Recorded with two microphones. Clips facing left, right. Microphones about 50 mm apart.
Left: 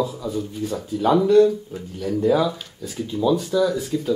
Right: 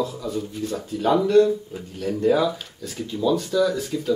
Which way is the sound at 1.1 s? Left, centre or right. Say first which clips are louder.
Left 2 dB; centre.